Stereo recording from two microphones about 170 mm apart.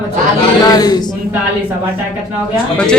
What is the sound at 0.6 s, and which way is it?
Speech, 25° left (ahead or behind).